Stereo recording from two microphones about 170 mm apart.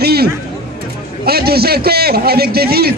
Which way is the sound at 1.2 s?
65° right (ahead or behind).